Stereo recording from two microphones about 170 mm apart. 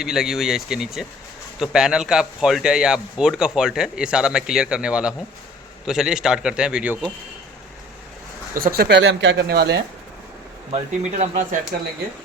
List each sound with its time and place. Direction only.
0.0 s a man's voice: 5° right (ahead or behind)
8.5 s speech: 60° right (ahead or behind); by 9.8 s 80° right
10.7 s speech: 40° right (ahead or behind)
11.5 s speech: 50° right (ahead or behind)